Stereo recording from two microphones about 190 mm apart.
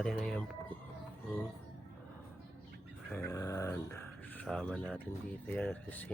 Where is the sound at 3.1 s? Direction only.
15° left (ahead or behind).